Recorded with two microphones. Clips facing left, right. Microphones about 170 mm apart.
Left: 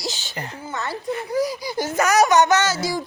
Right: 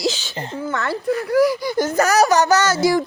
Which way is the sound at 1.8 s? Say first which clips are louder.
Right 1 dB; 40° right (ahead or behind).